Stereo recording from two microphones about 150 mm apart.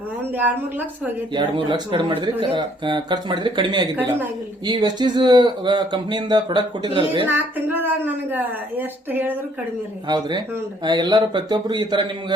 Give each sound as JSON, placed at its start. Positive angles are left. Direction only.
{"t": 0.3, "sound": "a woman's voice", "side_deg": -10}
{"t": 1.3, "sound": "speech", "side_deg": -30}
{"t": 7.3, "sound": "a woman's voice", "side_deg": -15}
{"t": 10.1, "sound": "speech", "side_deg": -30}